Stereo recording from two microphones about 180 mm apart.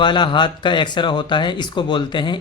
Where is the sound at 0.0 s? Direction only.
25° left (ahead or behind).